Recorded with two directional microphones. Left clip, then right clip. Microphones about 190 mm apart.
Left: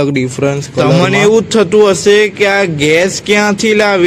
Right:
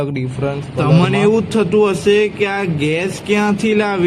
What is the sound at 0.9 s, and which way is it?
Speech, 20° left (ahead or behind).